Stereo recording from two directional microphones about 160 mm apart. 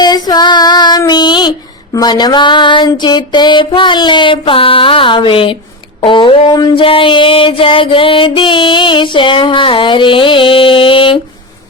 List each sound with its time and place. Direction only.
0.0 s female singing: 25° left (ahead or behind)
6.0 s music: 30° left (ahead or behind)